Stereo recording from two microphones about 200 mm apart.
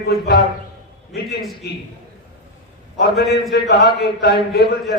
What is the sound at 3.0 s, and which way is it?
A man's voice, 55° left (ahead or behind).